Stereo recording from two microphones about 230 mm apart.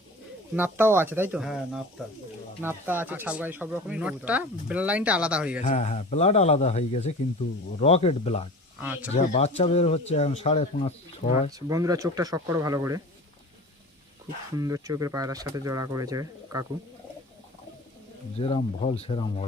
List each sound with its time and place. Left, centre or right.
0.5 s speech: centre
5.6 s speech: left
8.8 s speech: centre
9.1 s speech: left
11.5 s speech: centre
14.5 s speech: centre
18.3 s speech: left